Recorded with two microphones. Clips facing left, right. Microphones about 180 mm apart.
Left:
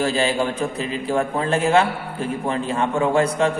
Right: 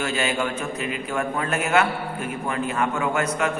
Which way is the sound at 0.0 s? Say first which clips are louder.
Left 4 dB; 30° left (ahead or behind).